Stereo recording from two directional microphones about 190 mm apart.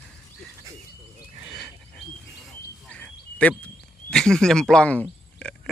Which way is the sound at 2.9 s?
5° left (ahead or behind).